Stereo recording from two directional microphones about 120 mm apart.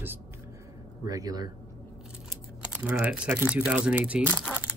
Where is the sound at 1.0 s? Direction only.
30° right (ahead or behind).